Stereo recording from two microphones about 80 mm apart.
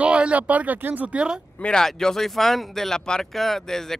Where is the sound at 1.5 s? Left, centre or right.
Centre.